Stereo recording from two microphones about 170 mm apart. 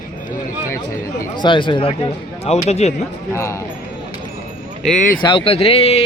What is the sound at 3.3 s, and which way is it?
Speech, 15° left (ahead or behind).